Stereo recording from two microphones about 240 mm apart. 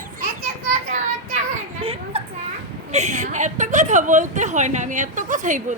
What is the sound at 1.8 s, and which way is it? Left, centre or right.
Children playing, right.